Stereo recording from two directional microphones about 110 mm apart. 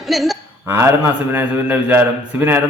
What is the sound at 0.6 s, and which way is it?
Speech, 25° right (ahead or behind).